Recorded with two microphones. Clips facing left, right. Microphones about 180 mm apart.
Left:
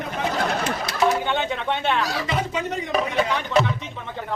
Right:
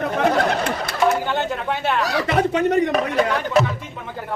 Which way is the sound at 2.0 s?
65° right (ahead or behind).